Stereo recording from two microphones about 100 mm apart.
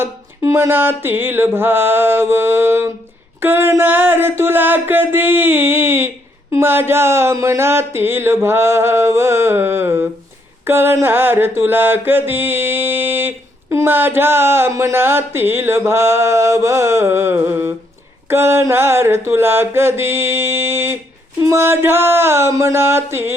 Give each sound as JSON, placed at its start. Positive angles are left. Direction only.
{"t": 0.0, "sound": "mantra", "side_deg": -25}